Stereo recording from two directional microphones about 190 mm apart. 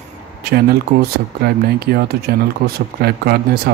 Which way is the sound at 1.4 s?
55° right (ahead or behind).